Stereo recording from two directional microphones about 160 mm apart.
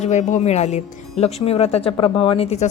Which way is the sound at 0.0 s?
45° left (ahead or behind).